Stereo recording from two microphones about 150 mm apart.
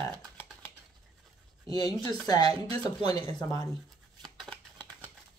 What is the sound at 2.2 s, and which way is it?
Speech, 30° left (ahead or behind).